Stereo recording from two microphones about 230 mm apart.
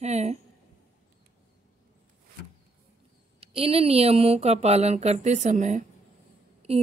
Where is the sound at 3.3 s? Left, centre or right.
Right.